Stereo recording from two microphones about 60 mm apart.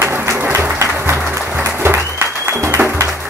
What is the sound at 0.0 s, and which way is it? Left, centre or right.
Applause, right.